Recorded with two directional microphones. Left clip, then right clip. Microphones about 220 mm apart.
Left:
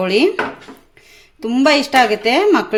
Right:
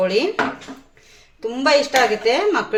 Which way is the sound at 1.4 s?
40° left (ahead or behind).